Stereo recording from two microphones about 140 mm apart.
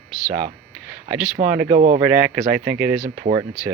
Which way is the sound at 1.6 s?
65° right (ahead or behind).